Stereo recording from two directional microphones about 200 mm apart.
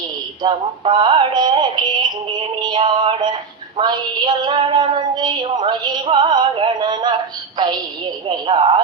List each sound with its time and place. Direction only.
0.4 s female singing: 25° right (ahead or behind)
2.6 s synthetic singing: 20° right (ahead or behind)
3.8 s female singing: 20° right (ahead or behind)